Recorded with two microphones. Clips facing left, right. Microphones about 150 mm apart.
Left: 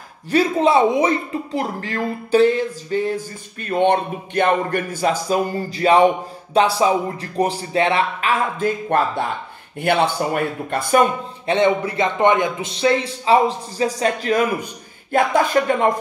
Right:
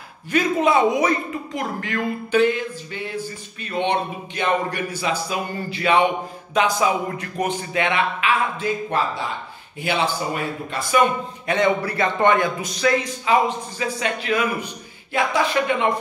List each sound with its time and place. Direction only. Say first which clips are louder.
0.3 s speech: left 3 dB; 30° left (ahead or behind); by 11.1 s 50° left (ahead or behind)
11.4 s a man's voice: left 3 dB; 25° left (ahead or behind); by 15.9 s 45° left (ahead or behind)